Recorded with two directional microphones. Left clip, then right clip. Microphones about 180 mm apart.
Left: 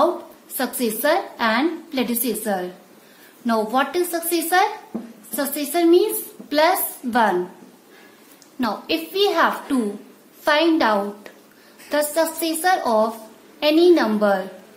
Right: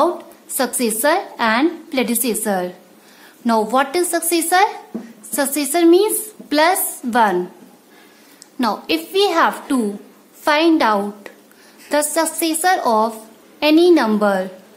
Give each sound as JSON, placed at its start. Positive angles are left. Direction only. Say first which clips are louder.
{"t": 0.6, "sound": "a woman's voice", "louder": "right 4 dB", "side_deg": -40}
{"t": 8.5, "sound": "a woman's voice", "louder": "right 4 dB", "side_deg": -40}